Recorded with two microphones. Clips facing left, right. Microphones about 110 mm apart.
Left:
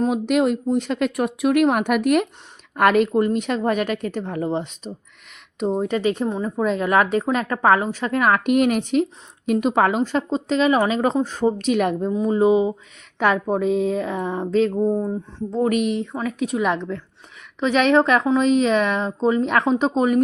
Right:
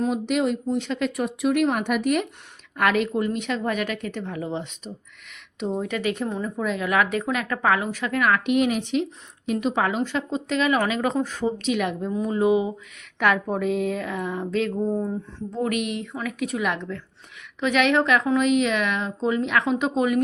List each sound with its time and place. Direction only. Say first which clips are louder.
0.1 s speech: left 4 dB; 55° left (ahead or behind)
2.7 s a woman's voice: left 5 dB; 45° left (ahead or behind)
11.4 s a woman's voice: left 7 dB; 45° left (ahead or behind)
12.1 s speech: left 3 dB; 25° left (ahead or behind)
14.9 s a sound: left 3 dB; 15° left (ahead or behind)
15.5 s a woman's voice: left 6 dB; 35° left (ahead or behind)